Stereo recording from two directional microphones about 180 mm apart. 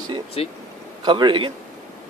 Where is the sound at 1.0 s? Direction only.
25° right (ahead or behind).